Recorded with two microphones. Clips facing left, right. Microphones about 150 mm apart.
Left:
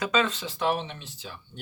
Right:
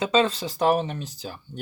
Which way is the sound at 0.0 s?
30° right (ahead or behind).